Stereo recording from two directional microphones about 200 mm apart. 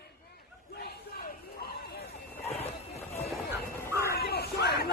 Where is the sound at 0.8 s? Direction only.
50° left (ahead or behind).